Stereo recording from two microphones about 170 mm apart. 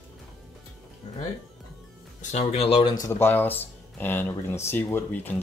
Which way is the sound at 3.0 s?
15° left (ahead or behind).